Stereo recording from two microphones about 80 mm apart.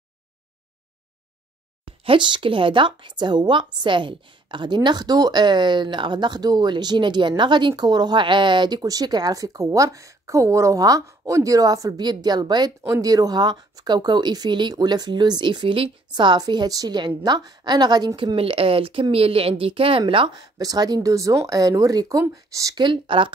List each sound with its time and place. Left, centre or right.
1.9 s speech: right
19.7 s speech: right
20.5 s speech: right
22.8 s speech: right